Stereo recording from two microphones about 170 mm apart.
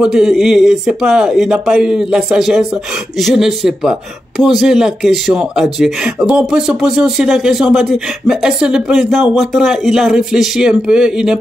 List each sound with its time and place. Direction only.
0.0 s speech: 5° right (ahead or behind)